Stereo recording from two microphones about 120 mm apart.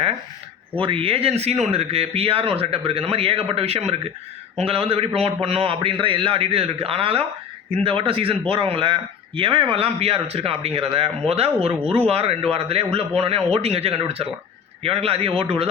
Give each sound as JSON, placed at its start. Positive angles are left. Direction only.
{"t": 0.8, "sound": "a man's voice", "side_deg": -50}